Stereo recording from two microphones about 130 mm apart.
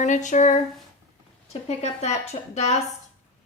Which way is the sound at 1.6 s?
60° left (ahead or behind).